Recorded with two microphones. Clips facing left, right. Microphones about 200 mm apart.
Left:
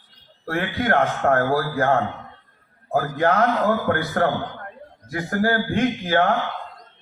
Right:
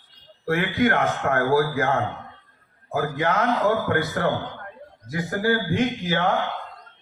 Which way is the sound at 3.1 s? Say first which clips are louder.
Left 5 dB; 55° left (ahead or behind).